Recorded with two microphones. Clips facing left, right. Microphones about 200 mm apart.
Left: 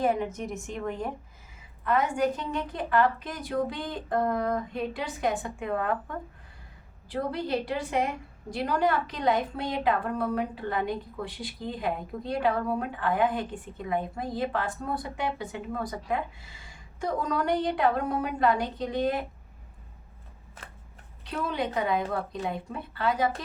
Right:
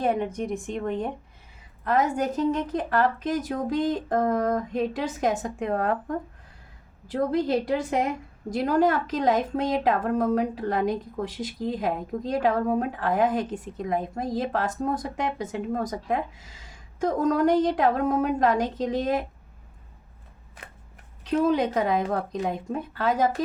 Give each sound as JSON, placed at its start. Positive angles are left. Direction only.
{"t": 0.3, "sound": "a woman's voice", "side_deg": 5}
{"t": 0.8, "sound": "speech", "side_deg": -20}
{"t": 1.8, "sound": "a woman's voice", "side_deg": -40}
{"t": 21.4, "sound": "a woman's voice", "side_deg": -45}